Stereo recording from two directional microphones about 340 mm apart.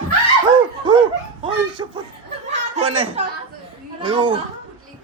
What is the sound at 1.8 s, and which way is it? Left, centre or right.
Speech, centre.